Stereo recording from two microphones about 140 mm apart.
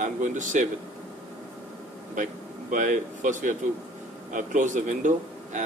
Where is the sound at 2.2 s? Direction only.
65° right (ahead or behind).